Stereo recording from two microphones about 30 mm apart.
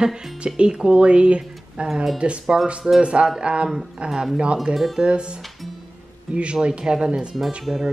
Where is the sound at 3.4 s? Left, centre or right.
Right.